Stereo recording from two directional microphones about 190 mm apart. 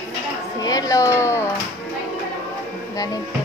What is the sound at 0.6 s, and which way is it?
Speech, 20° left (ahead or behind).